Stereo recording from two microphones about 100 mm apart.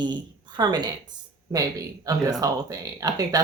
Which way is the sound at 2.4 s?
35° right (ahead or behind).